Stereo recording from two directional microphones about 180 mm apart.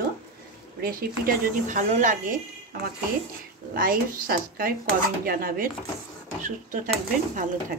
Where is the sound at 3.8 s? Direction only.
55° right (ahead or behind).